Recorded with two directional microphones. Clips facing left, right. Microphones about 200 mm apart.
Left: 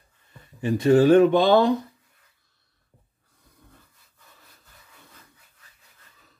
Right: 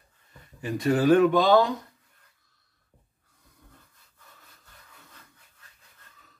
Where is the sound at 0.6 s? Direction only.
25° left (ahead or behind).